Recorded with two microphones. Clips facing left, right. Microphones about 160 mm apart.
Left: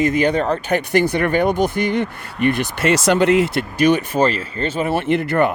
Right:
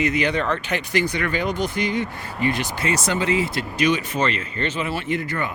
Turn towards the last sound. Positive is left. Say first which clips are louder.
# left 9 dB
turn(degrees=65)  # may be behind; listen again after turning